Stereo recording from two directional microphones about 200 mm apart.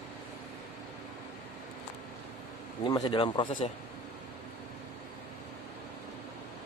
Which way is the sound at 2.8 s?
25° left (ahead or behind).